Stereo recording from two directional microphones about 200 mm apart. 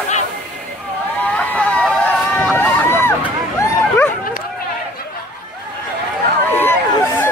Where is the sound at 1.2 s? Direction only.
10° left (ahead or behind).